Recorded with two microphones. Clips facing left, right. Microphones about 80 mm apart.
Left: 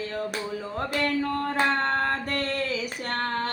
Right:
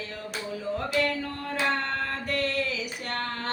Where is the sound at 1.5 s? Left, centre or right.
Left.